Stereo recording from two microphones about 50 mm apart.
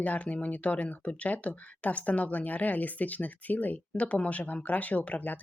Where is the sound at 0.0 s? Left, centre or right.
Left.